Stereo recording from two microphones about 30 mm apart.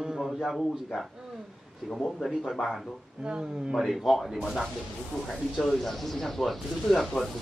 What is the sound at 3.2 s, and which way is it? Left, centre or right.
Speech, right.